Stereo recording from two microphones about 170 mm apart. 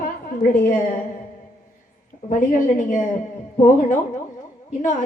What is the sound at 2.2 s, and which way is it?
A woman's voice, 50° left (ahead or behind).